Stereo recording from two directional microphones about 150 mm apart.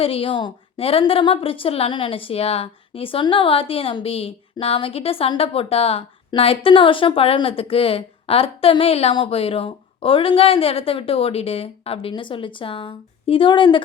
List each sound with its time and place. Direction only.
0.0 s a woman's voice: 40° left (ahead or behind)